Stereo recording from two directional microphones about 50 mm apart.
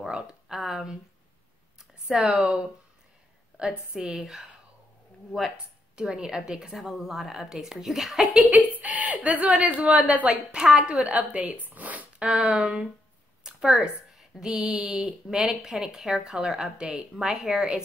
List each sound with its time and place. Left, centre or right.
0.1 s speech: centre
0.6 s a woman's voice: centre
1.8 s a sound: centre
3.9 s a woman's voice: centre
5.9 s a woman's voice: centre
6.7 s a woman's voice: centre
8.5 s speech: right
11.6 s zipper: right
12.3 s a woman's voice: centre
13.4 s a sound: centre
14.1 s a woman's voice: centre
16.7 s a woman's voice: centre